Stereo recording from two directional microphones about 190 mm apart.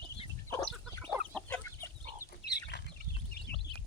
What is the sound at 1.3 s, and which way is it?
Chicken, 5° left (ahead or behind).